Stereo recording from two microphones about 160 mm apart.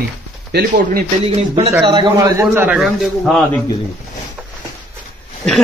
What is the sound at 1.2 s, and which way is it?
A man's voice, 40° right (ahead or behind).